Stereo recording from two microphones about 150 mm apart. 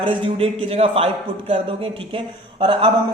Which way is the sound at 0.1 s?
35° right (ahead or behind).